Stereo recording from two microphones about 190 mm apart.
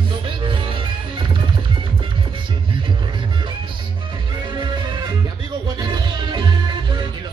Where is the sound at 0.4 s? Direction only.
25° right (ahead or behind).